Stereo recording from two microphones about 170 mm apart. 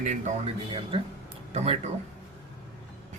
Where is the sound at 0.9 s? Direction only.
30° right (ahead or behind).